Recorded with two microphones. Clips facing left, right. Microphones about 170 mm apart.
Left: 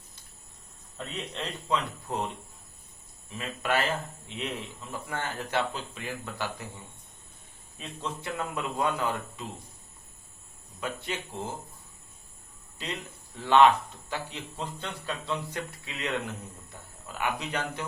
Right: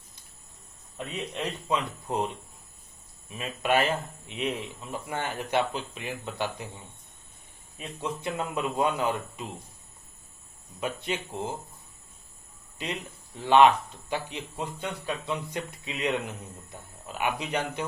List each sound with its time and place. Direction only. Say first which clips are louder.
0.9 s speech: right 3 dB; 15° right (ahead or behind)
10.8 s speech: right 3 dB; 20° right (ahead or behind)
12.8 s speech: right 2 dB; 20° right (ahead or behind)